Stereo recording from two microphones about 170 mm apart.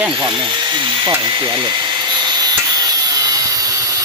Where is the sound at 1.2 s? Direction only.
25° right (ahead or behind).